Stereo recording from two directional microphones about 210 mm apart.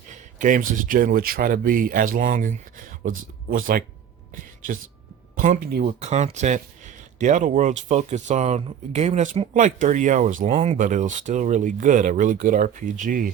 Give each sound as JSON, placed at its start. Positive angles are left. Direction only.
{"t": 0.1, "sound": "speech", "side_deg": -35}
{"t": 5.4, "sound": "speech", "side_deg": -40}